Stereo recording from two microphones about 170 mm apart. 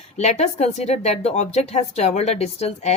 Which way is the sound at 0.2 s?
40° left (ahead or behind).